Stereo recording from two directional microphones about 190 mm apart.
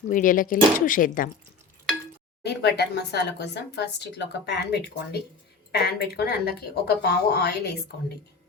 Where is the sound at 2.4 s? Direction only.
60° left (ahead or behind).